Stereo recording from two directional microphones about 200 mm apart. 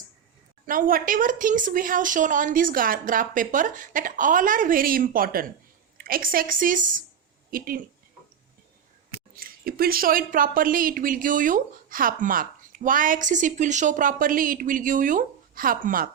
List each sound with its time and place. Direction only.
0.6 s a woman's voice: 45° right (ahead or behind)
9.3 s a woman's voice: 50° right (ahead or behind)